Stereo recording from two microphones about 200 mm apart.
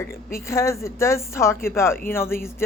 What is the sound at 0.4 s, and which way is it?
A woman's voice, 15° left (ahead or behind).